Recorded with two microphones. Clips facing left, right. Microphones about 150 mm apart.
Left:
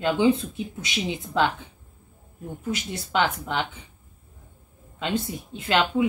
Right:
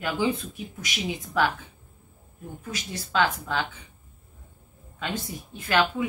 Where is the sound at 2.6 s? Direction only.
20° left (ahead or behind).